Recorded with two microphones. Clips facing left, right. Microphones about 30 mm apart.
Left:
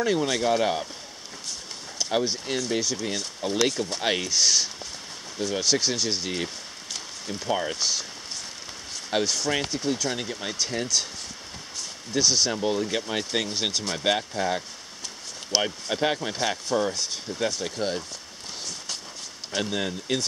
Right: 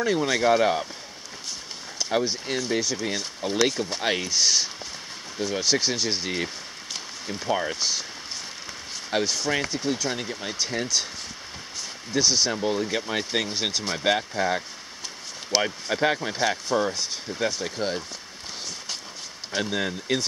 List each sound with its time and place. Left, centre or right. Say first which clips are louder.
0.0 s speech: right 2 dB; centre
2.0 s speech: right 1 dB; centre
9.1 s speech: even; centre
12.1 s speech: right 1 dB; centre
19.5 s speech: right 1 dB; centre